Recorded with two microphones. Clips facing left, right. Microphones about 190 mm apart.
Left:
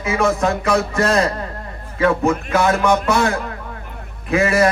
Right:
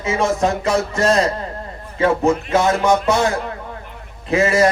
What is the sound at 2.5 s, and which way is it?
Speech, 25° right (ahead or behind).